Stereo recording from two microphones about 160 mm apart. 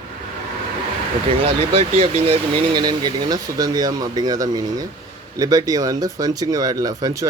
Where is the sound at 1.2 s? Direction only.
35° right (ahead or behind).